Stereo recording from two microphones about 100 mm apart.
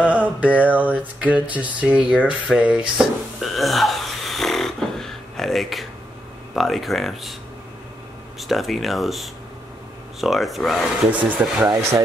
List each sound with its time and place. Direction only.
0.0 s a sound: 15° right (ahead or behind)
6.5 s speech: centre (ahead or behind)
8.4 s speech: centre (ahead or behind)
11.1 s speech: 15° right (ahead or behind)
11.6 s speech: 30° right (ahead or behind)